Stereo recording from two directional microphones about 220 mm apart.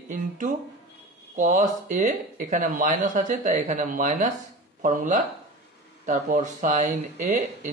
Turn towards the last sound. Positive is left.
turn(degrees=-30)  # may be behind; listen again after turning